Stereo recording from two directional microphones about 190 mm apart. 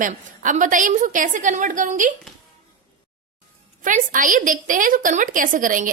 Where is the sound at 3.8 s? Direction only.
45° right (ahead or behind).